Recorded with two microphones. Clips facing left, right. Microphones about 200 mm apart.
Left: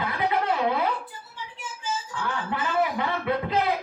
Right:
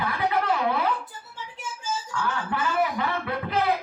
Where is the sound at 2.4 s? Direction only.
20° left (ahead or behind).